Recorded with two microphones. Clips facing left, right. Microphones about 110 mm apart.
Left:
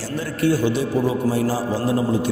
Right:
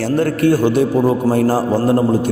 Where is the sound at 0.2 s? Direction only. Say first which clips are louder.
Right 5 dB; 55° right (ahead or behind).